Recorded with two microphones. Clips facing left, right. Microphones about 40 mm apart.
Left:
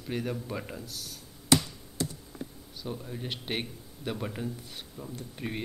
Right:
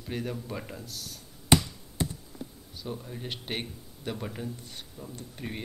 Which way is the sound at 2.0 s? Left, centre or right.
Right.